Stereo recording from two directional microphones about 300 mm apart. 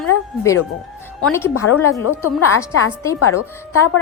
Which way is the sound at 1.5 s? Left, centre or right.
Left.